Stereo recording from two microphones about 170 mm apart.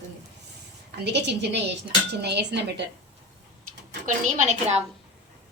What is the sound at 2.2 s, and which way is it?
Dishes, 85° right.